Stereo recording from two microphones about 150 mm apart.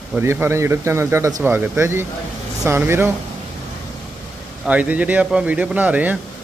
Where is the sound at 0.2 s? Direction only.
15° right (ahead or behind).